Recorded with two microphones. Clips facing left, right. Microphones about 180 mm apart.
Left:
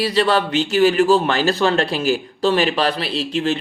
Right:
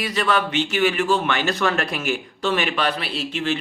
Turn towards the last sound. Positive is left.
turn(degrees=35)  # may be behind; listen again after turning